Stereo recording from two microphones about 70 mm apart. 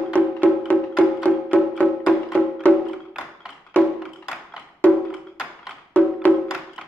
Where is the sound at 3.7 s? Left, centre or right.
Centre.